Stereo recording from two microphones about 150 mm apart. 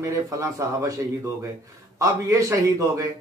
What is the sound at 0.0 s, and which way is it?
A man's voice, 20° right (ahead or behind).